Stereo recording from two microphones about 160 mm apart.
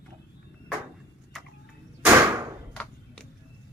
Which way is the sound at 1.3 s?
Centre (ahead or behind).